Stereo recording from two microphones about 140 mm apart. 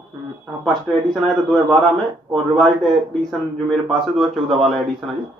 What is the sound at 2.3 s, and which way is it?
Speech, 5° left (ahead or behind).